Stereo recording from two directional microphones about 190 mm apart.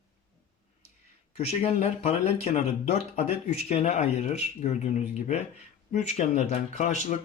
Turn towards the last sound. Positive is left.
turn(degrees=40)  # may be behind; listen again after turning